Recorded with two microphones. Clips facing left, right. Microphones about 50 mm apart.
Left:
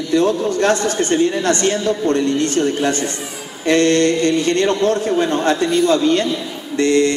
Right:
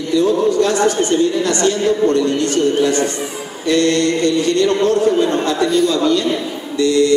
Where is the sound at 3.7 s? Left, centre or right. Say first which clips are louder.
Left 1 dB; left.